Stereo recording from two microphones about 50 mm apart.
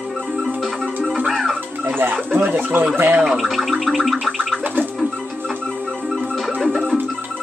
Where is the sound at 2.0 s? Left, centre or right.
Right.